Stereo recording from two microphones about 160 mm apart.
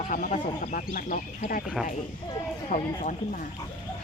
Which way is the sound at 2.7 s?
55° left (ahead or behind).